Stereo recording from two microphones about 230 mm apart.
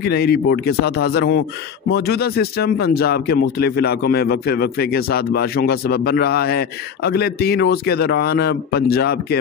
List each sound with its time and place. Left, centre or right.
0.0 s speech: left